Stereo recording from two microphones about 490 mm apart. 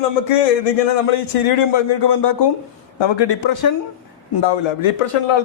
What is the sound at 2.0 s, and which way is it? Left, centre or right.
A man's voice, left.